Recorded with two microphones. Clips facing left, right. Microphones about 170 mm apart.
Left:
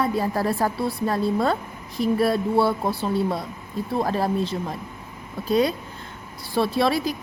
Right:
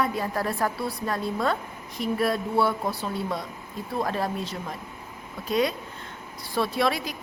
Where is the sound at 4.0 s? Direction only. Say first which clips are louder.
Left 3 dB; 30° left (ahead or behind).